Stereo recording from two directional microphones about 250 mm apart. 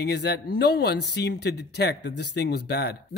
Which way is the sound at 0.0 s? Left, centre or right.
Left.